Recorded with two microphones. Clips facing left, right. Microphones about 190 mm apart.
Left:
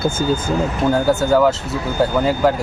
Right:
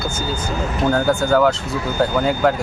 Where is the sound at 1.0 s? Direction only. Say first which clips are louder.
Left 2 dB; 5° left (ahead or behind).